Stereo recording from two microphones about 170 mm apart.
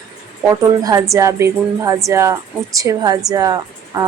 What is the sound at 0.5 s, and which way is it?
Speech, 20° right (ahead or behind).